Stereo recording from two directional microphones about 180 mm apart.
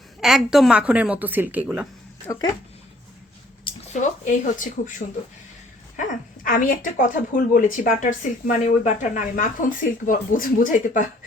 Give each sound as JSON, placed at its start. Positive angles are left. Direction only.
{"t": 0.2, "sound": "a woman's voice", "side_deg": 0}
{"t": 2.2, "sound": "speech", "side_deg": 20}
{"t": 3.9, "sound": "a woman's voice", "side_deg": 45}
{"t": 6.4, "sound": "a woman's voice", "side_deg": 50}